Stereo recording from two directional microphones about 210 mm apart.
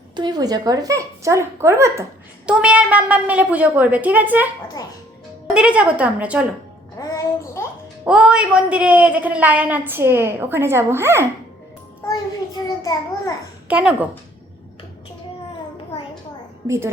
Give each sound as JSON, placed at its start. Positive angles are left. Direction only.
{"t": 0.2, "sound": "a woman's voice", "side_deg": -20}
{"t": 5.5, "sound": "a woman's voice", "side_deg": -5}
{"t": 7.0, "sound": "music", "side_deg": 15}
{"t": 8.0, "sound": "a woman's voice", "side_deg": -5}
{"t": 12.6, "sound": "a child's voice", "side_deg": 15}
{"t": 13.7, "sound": "a woman's voice", "side_deg": -5}
{"t": 16.6, "sound": "a woman's voice", "side_deg": -15}